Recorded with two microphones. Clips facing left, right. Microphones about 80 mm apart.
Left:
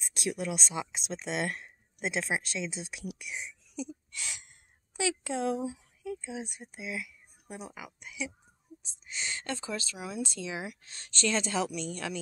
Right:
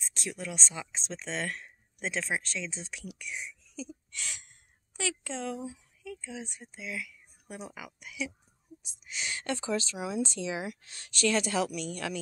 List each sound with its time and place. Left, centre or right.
0.6 s a woman's voice: centre
3.4 s a sound: centre
4.9 s a woman's voice: centre
7.4 s speech: centre
9.1 s speech: centre